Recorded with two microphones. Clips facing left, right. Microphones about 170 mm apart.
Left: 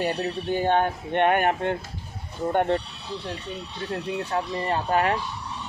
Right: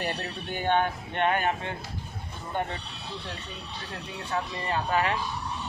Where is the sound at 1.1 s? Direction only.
55° left (ahead or behind).